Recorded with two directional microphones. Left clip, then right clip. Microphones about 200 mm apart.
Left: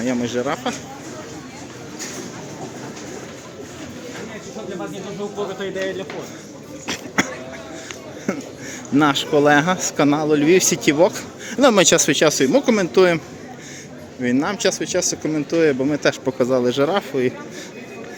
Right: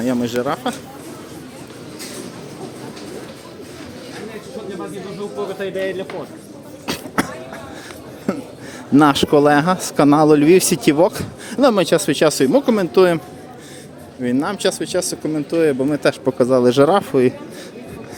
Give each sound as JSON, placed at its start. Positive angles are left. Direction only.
{"t": 0.0, "sound": "speech", "side_deg": -20}
{"t": 7.2, "sound": "a sound", "side_deg": -20}
{"t": 8.3, "sound": "speech", "side_deg": -10}
{"t": 9.0, "sound": "speech", "side_deg": -25}
{"t": 11.7, "sound": "speech", "side_deg": -5}